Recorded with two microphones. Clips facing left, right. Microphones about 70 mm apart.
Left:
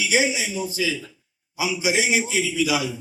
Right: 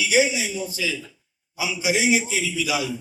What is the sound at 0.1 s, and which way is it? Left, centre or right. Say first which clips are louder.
A man's voice: right 2 dB; left.